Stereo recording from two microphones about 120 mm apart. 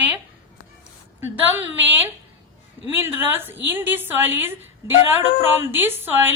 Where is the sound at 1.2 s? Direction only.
15° right (ahead or behind).